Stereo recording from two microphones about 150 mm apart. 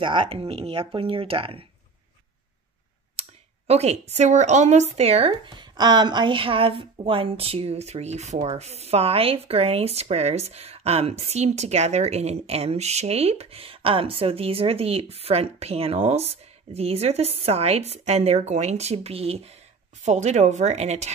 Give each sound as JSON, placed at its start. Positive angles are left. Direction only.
{"t": 0.0, "sound": "speech", "side_deg": -35}
{"t": 3.2, "sound": "speech", "side_deg": -45}